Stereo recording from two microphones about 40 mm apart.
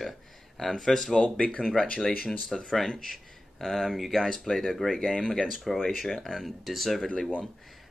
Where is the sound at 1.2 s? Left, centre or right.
Left.